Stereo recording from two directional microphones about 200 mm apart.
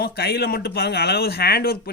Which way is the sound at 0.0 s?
50° left (ahead or behind).